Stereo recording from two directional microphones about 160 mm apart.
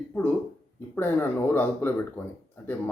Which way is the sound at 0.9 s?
10° left (ahead or behind).